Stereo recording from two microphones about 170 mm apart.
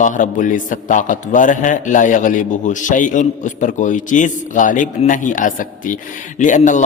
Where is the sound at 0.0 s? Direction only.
50° left (ahead or behind).